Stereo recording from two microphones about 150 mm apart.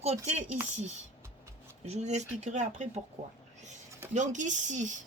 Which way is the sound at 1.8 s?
50° right (ahead or behind).